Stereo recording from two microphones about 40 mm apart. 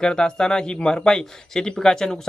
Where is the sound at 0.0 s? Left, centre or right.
Left.